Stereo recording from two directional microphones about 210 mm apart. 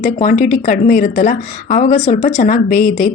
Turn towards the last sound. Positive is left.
turn(degrees=40)  # may be behind; listen again after turning